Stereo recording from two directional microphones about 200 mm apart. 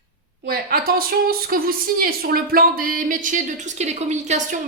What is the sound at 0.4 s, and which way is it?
A woman's voice, 50° right (ahead or behind).